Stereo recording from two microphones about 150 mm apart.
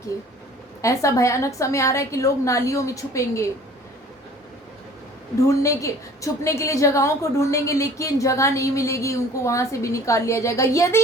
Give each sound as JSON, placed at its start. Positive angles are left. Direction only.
{"t": 0.8, "sound": "a woman's voice", "side_deg": 20}
{"t": 5.5, "sound": "a woman's voice", "side_deg": 20}